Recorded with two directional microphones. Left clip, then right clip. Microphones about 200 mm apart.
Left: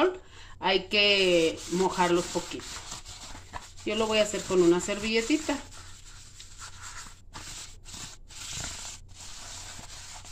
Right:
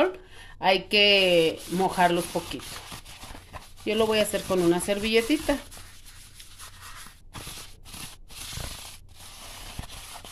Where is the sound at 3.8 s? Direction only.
55° right (ahead or behind).